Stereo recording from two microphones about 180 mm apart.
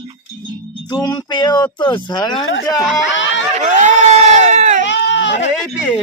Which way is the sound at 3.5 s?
45° right (ahead or behind).